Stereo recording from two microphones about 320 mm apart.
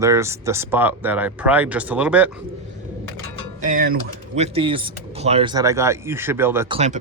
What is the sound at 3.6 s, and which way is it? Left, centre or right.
Speech, right.